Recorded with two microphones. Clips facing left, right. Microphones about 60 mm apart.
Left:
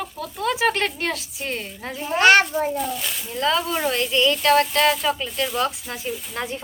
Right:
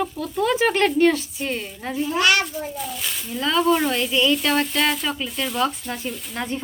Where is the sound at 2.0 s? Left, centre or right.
Left.